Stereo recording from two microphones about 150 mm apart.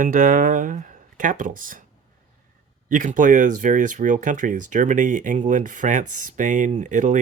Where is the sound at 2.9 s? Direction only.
60° right (ahead or behind).